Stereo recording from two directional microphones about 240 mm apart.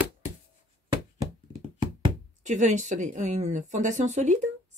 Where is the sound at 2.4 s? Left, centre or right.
Right.